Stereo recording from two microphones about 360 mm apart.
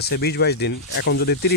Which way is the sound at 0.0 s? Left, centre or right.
Left.